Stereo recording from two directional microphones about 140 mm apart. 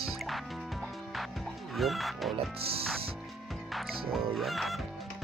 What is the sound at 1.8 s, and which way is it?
Speech, centre (ahead or behind).